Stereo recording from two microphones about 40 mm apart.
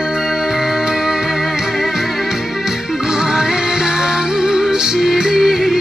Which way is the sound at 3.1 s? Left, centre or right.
Centre.